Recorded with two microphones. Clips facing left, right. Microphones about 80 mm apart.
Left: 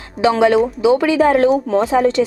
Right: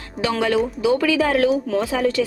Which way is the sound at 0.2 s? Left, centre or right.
Left.